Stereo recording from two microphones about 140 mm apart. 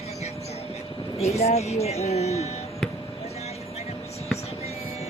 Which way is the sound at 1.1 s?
50° left (ahead or behind).